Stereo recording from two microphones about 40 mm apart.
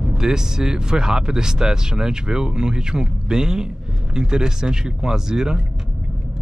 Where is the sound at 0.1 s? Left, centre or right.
Centre.